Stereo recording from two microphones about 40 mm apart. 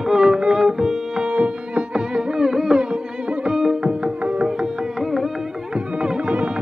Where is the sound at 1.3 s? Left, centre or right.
Right.